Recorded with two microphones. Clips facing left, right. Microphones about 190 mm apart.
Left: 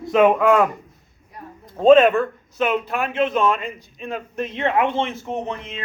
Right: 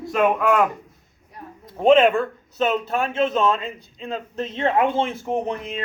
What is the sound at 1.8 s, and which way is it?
Speech, 25° right (ahead or behind).